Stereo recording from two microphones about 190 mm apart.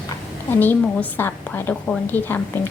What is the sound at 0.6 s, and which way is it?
A woman's voice, 10° left (ahead or behind).